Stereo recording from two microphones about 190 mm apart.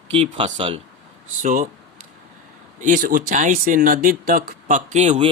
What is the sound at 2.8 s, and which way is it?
Speech, 40° right (ahead or behind).